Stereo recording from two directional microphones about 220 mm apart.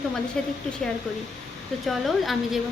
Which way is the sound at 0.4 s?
5° left (ahead or behind).